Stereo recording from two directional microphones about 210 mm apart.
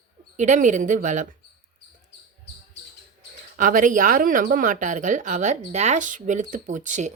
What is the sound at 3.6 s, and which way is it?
Speech, 40° right (ahead or behind).